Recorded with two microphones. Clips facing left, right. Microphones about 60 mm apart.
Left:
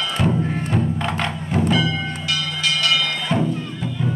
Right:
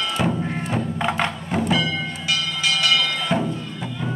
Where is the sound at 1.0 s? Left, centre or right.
Centre.